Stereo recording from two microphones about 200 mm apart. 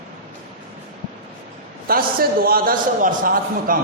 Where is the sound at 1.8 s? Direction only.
50° right (ahead or behind).